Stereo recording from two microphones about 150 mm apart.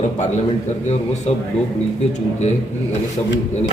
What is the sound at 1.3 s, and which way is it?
Speech, 45° left (ahead or behind).